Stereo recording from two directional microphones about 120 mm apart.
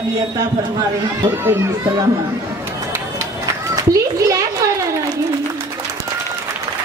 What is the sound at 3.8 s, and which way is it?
Children playing, 25° right (ahead or behind).